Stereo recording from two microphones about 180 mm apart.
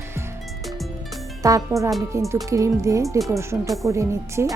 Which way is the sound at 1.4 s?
20° right (ahead or behind).